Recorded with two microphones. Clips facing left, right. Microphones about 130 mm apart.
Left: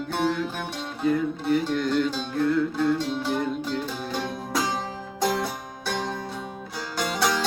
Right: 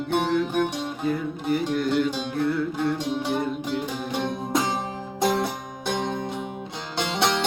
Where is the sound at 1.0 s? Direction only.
Centre (ahead or behind); by 4.8 s 20° right (ahead or behind).